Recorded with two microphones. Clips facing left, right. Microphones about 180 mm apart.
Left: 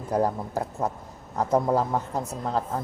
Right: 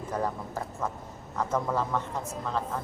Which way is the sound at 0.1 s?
40° left (ahead or behind).